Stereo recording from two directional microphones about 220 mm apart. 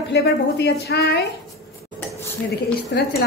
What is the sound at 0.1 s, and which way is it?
A woman's voice, 50° left (ahead or behind).